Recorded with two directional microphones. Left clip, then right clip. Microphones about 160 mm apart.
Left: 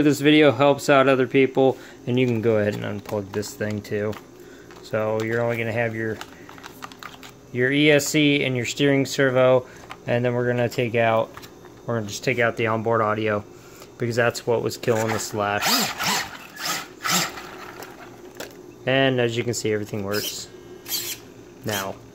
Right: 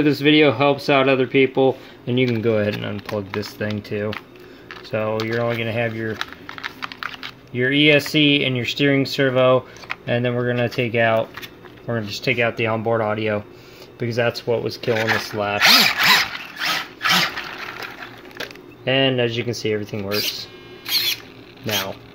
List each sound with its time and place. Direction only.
0.0 s speech: 5° left (ahead or behind)
7.5 s speech: centre (ahead or behind)
14.7 s speech: 20° left (ahead or behind); by 16.1 s 5° left (ahead or behind)
17.0 s a sound: 20° left (ahead or behind)
18.9 s speech: 5° left (ahead or behind)